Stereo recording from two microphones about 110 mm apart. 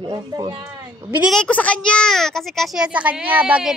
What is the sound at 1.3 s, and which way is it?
A child's voice, 10° left (ahead or behind).